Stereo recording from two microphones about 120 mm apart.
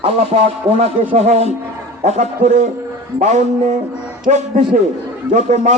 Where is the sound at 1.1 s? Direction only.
65° right (ahead or behind).